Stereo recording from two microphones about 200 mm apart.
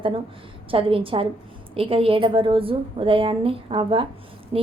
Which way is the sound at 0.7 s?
25° right (ahead or behind).